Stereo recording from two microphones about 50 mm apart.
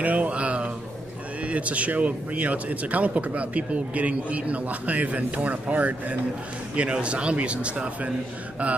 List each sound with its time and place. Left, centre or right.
0.0 s speech: right